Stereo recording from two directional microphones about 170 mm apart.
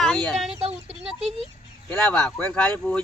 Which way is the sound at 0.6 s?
35° right (ahead or behind).